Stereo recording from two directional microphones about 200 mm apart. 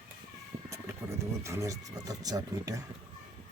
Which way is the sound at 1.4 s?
15° right (ahead or behind).